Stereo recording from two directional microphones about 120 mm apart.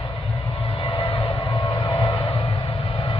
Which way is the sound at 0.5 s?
50° left (ahead or behind).